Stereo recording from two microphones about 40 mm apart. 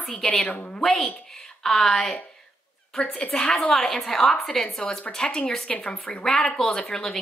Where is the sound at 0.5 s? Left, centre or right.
Left.